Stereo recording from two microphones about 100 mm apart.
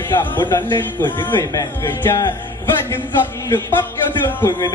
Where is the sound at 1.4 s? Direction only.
30° left (ahead or behind).